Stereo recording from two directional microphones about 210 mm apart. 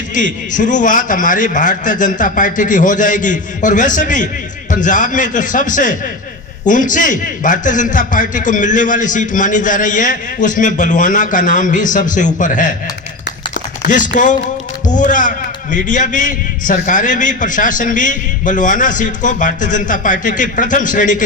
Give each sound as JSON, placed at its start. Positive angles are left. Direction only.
{"t": 0.5, "sound": "a man's voice", "side_deg": 35}
{"t": 13.5, "sound": "a sound", "side_deg": 35}
{"t": 14.8, "sound": "a man's voice", "side_deg": 35}